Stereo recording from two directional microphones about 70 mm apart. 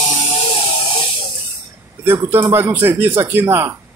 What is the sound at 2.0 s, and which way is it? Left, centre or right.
Speech, right.